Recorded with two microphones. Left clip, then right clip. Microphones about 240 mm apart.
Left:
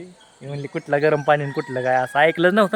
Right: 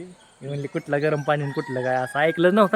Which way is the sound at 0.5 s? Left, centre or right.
Centre.